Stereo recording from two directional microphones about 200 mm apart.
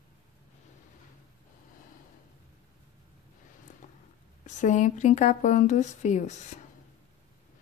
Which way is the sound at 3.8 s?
40° left (ahead or behind).